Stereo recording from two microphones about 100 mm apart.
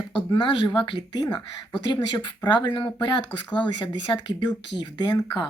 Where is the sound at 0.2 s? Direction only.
55° left (ahead or behind).